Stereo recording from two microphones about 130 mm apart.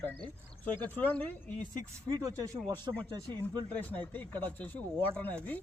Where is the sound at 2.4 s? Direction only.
25° right (ahead or behind).